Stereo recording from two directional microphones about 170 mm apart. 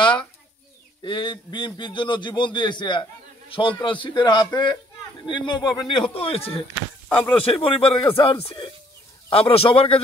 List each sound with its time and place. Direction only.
1.0 s a man's voice: 25° left (ahead or behind)
7.1 s speech: 10° left (ahead or behind)
7.6 s speech: 35° left (ahead or behind)